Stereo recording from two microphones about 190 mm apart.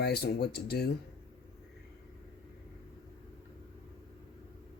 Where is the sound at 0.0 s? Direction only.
60° left (ahead or behind).